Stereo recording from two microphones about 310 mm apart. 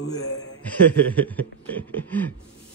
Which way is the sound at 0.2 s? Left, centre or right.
Left.